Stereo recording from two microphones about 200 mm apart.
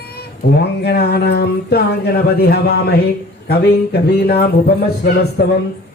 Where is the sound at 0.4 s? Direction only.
55° left (ahead or behind).